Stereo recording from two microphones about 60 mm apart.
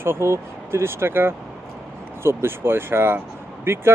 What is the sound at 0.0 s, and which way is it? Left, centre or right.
Speech, right.